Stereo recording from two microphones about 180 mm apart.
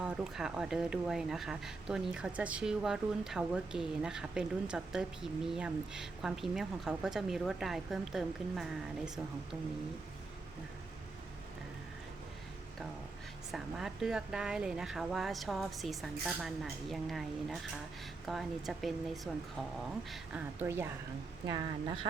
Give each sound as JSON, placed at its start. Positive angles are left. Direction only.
{"t": 0.0, "sound": "speech", "side_deg": -5}
{"t": 13.5, "sound": "a woman's voice", "side_deg": 0}